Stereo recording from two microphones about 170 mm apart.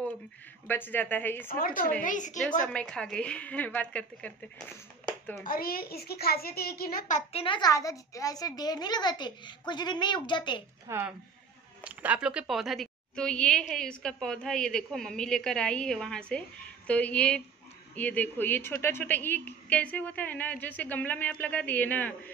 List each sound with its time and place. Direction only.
0.7 s a woman's voice: 10° left (ahead or behind)
2.0 s a woman's voice: 45° left (ahead or behind)
2.6 s a woman's voice: 5° left (ahead or behind)
5.4 s a child's voice: 60° left (ahead or behind)
7.4 s a child's voice: 25° left (ahead or behind)
10.9 s a woman's voice: 15° right (ahead or behind); by 22.1 s 10° left (ahead or behind)